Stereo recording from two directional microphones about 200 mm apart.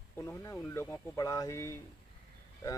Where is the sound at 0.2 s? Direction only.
10° left (ahead or behind).